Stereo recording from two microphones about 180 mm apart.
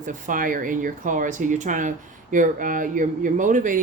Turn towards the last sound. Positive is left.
turn(degrees=-45)  # may be behind; listen again after turning